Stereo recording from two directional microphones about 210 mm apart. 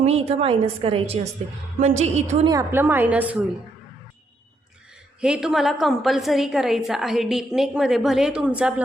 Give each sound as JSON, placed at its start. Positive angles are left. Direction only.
{"t": 0.0, "sound": "a woman's voice", "side_deg": -30}
{"t": 2.5, "sound": "a woman's voice", "side_deg": -15}
{"t": 5.2, "sound": "a woman's voice", "side_deg": -5}